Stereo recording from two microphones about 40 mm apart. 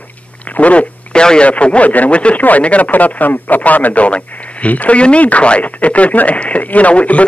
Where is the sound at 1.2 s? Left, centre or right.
Left.